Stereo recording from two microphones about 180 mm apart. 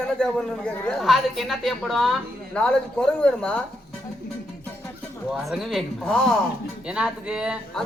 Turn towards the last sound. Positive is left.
turn(degrees=-5)  # may be behind; listen again after turning